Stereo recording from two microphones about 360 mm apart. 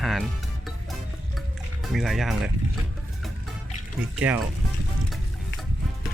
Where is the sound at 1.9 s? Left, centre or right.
Centre.